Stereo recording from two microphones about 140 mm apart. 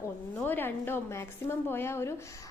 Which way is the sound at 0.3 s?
15° left (ahead or behind).